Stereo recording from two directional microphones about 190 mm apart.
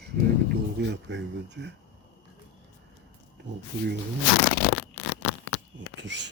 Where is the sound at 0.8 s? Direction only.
65° right (ahead or behind).